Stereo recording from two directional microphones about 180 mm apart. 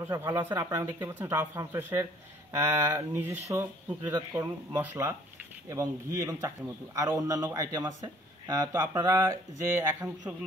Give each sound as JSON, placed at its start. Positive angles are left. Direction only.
{"t": 0.1, "sound": "a man's voice", "side_deg": -20}